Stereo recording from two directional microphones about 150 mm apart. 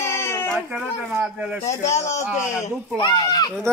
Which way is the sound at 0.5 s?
5° right (ahead or behind).